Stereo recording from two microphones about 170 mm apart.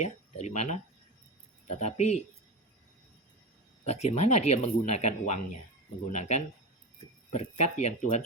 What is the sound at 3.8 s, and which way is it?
Speech, 40° left (ahead or behind).